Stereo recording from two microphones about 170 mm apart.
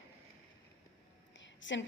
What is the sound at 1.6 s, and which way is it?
Speech, 90° left.